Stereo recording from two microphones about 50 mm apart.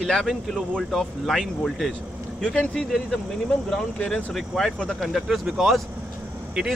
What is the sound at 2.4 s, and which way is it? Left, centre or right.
Speech, centre.